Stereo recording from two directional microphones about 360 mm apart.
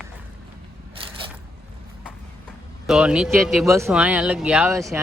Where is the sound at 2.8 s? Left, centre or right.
Centre.